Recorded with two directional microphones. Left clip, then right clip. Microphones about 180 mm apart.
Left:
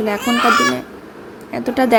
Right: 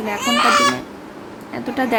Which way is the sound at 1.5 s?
25° left (ahead or behind).